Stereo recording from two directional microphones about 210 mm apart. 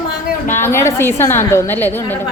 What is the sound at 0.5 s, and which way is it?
A woman's voice, 10° left (ahead or behind).